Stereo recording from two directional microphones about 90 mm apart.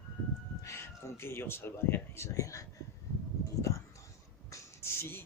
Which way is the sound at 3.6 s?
35° left (ahead or behind).